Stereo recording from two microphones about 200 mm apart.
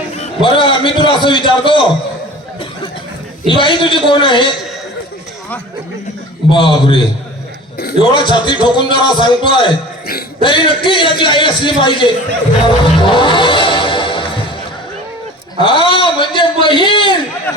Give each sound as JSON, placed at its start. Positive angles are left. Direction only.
{"t": 0.4, "sound": "a man's voice", "side_deg": 25}
{"t": 3.4, "sound": "a man's voice", "side_deg": 25}
{"t": 6.5, "sound": "a man's voice", "side_deg": 25}
{"t": 8.1, "sound": "a man's voice", "side_deg": 25}
{"t": 12.6, "sound": "music", "side_deg": 25}
{"t": 15.6, "sound": "a man's voice", "side_deg": 25}